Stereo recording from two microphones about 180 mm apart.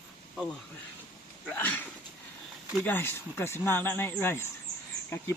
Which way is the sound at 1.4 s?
10° left (ahead or behind).